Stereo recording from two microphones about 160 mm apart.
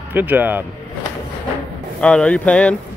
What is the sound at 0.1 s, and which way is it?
Speech, 10° right (ahead or behind).